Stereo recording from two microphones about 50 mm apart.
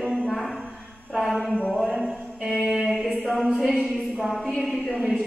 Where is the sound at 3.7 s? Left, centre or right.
Centre.